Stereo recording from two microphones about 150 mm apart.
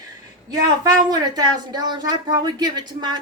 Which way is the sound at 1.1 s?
25° right (ahead or behind).